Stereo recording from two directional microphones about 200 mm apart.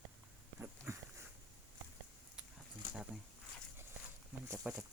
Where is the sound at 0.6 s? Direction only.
15° right (ahead or behind).